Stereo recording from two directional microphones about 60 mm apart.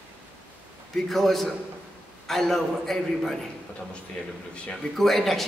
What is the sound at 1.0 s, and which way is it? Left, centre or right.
A man's voice, centre.